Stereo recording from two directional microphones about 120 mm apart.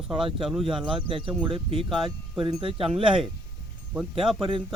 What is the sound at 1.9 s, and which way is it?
Speech, centre (ahead or behind).